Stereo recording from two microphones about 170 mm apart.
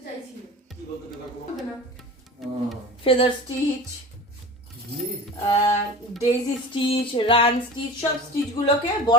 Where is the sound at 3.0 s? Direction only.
35° left (ahead or behind).